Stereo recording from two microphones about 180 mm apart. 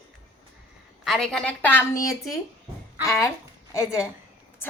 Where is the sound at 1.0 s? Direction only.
Centre (ahead or behind).